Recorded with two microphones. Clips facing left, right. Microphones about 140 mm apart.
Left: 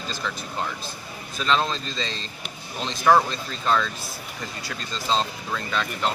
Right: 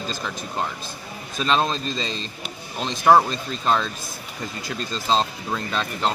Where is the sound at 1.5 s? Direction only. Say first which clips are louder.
Right 2 dB; 25° right (ahead or behind).